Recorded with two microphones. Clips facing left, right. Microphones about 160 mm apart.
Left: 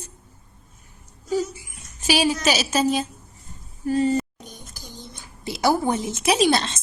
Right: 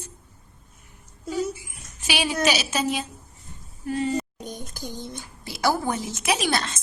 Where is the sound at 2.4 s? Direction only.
40° left (ahead or behind).